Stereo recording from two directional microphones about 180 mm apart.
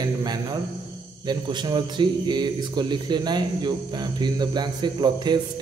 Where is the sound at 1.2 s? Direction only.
25° right (ahead or behind).